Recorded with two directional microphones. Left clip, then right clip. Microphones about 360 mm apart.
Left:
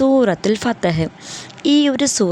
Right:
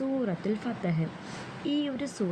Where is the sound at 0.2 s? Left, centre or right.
Left.